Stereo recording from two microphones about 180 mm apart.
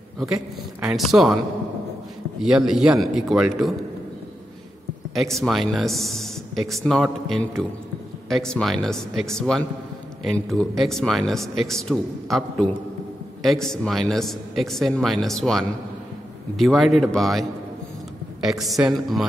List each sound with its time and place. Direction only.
0.2 s speech: 5° right (ahead or behind)
2.4 s speech: 5° right (ahead or behind)
5.1 s speech: centre (ahead or behind)